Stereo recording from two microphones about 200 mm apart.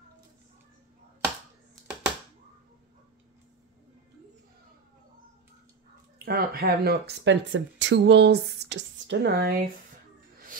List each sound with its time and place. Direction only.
6.2 s speech: 50° right (ahead or behind)